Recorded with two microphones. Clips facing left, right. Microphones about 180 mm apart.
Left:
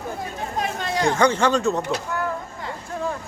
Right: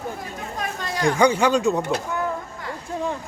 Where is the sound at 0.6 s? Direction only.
25° left (ahead or behind).